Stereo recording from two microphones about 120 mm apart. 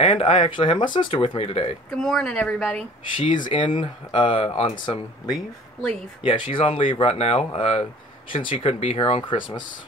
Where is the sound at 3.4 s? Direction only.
45° left (ahead or behind).